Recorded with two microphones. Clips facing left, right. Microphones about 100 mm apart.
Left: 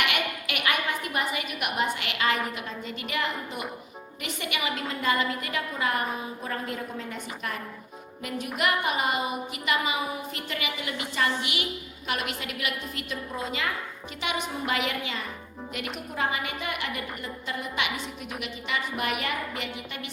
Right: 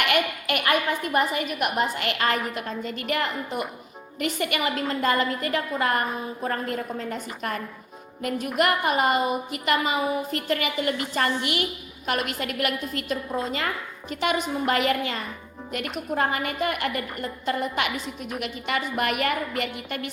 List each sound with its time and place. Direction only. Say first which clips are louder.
0.0 s a woman's voice: right 5 dB; 45° right (ahead or behind)